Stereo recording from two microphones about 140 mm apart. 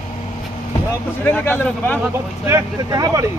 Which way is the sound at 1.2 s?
10° left (ahead or behind).